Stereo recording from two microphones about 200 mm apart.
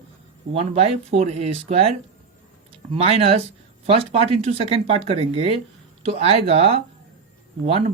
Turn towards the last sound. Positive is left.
turn(degrees=-30)  # may be behind; listen again after turning